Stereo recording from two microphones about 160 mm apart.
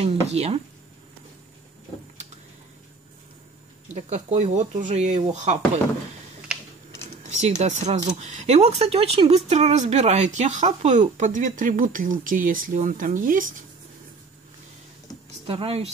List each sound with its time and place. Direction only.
0.0 s speech: 40° right (ahead or behind)
3.9 s speech: 45° right (ahead or behind)
7.2 s speech: 45° right (ahead or behind)
15.4 s speech: 35° right (ahead or behind)